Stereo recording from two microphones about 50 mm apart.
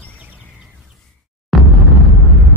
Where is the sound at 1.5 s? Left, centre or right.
Centre.